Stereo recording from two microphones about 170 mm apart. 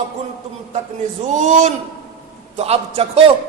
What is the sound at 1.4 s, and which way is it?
A man's voice, 45° right (ahead or behind).